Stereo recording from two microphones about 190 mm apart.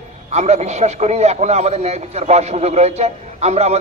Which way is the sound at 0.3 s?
35° right (ahead or behind).